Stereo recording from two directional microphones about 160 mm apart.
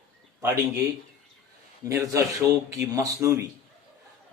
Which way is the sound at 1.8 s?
20° right (ahead or behind).